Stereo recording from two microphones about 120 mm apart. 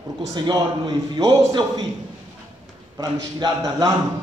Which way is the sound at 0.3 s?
35° right (ahead or behind).